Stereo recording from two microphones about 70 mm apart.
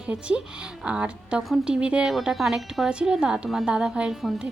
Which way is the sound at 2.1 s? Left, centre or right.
Centre.